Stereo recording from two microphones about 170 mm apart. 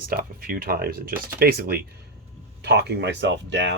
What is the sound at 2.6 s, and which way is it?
Speech, 75° right (ahead or behind).